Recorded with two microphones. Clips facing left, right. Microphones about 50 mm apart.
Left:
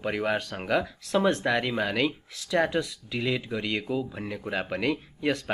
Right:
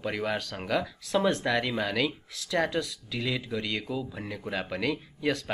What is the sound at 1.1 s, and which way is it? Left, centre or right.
Speech, centre.